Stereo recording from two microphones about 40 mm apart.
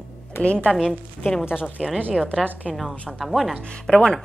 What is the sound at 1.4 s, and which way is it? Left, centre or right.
Speech, right.